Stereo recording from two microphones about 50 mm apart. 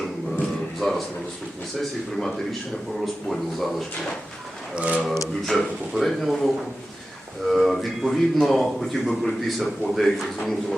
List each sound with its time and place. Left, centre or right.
0.8 s a sound: centre
1.8 s speech: centre
4.7 s speech: right
5.5 s speech: centre